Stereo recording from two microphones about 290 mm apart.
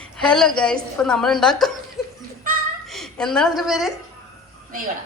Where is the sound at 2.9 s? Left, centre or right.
Centre.